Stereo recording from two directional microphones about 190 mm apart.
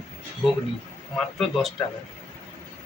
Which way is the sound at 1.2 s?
Centre (ahead or behind).